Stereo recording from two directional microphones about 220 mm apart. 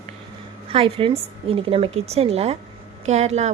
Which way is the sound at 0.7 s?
25° right (ahead or behind).